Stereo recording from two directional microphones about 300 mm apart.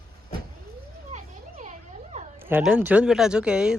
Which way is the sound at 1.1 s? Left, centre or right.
Right.